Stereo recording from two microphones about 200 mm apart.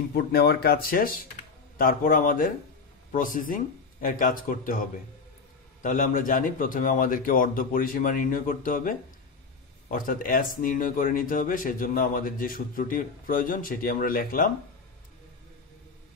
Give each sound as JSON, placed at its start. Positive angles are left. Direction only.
{"t": 0.1, "sound": "speech", "side_deg": 55}